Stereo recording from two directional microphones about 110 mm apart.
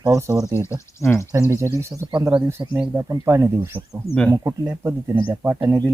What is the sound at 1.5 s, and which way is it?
Speech, 25° right (ahead or behind).